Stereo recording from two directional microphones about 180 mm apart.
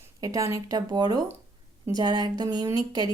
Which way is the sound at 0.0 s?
20° right (ahead or behind).